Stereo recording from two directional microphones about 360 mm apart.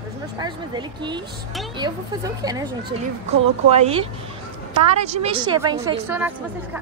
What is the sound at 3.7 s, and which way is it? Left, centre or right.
Speech, centre.